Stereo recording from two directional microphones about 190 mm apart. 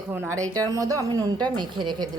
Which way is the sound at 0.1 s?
15° right (ahead or behind).